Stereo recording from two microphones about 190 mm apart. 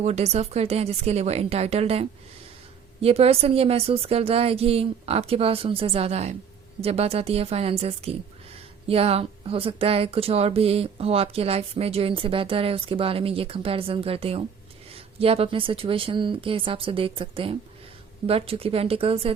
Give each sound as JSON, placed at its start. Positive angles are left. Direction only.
{"t": 0.0, "sound": "speech", "side_deg": -35}